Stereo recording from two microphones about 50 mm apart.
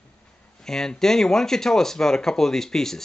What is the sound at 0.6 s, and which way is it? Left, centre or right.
Speech, centre.